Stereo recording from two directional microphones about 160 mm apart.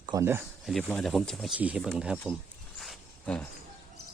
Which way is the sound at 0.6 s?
Centre (ahead or behind).